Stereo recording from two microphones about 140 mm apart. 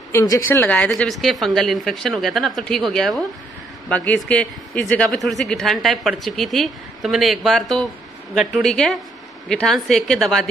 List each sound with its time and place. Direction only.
0.1 s speech: 25° left (ahead or behind)
0.5 s a man's voice: 10° left (ahead or behind)